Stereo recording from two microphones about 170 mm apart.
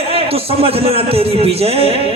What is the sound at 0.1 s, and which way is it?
A man's voice, 35° right (ahead or behind).